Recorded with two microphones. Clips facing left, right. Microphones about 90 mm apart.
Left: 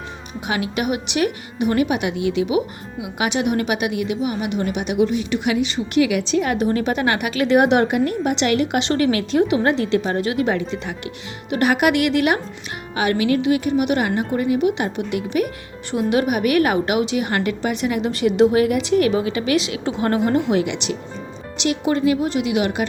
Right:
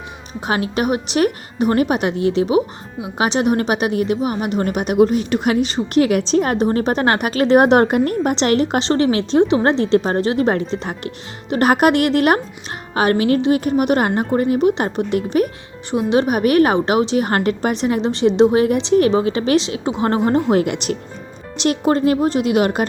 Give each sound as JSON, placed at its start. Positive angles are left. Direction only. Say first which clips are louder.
{"t": 0.4, "sound": "a woman's voice", "louder": "right 3 dB", "side_deg": -35}
{"t": 15.9, "sound": "a woman's voice", "louder": "right 2 dB", "side_deg": -25}